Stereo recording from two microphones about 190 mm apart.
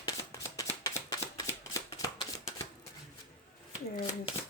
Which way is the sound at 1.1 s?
20° left (ahead or behind).